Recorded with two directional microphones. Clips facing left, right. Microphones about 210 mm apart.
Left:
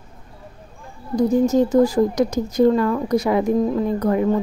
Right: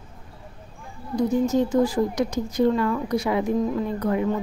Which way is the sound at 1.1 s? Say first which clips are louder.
Left 4 dB; 40° left (ahead or behind).